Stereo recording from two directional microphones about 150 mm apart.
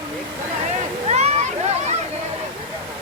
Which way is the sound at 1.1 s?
45° right (ahead or behind).